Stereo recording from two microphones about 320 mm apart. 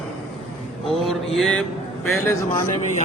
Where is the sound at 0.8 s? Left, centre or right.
Centre.